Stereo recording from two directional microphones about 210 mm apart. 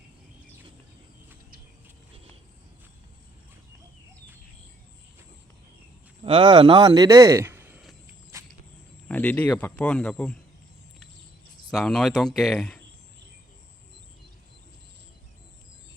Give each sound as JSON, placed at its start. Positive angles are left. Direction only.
{"t": 6.2, "sound": "speech", "side_deg": -25}
{"t": 8.3, "sound": "a sound", "side_deg": -15}
{"t": 9.0, "sound": "speech", "side_deg": 5}
{"t": 11.7, "sound": "speech", "side_deg": 0}